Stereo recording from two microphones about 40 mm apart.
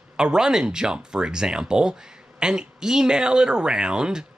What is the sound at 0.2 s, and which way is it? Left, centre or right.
Speech, centre.